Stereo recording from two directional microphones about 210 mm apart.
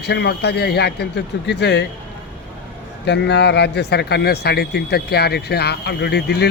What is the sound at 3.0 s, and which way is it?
Speech, 55° left (ahead or behind).